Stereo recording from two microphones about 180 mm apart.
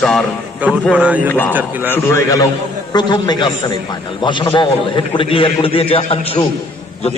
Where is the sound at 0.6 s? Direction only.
10° right (ahead or behind).